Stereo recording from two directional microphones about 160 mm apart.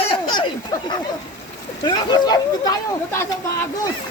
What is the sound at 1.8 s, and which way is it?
Speech, 25° left (ahead or behind).